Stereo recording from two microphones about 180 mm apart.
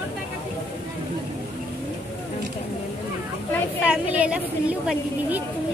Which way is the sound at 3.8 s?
5° right (ahead or behind).